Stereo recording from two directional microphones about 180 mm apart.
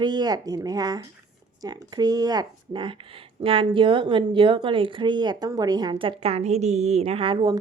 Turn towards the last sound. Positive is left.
turn(degrees=-25)  # may be behind; listen again after turning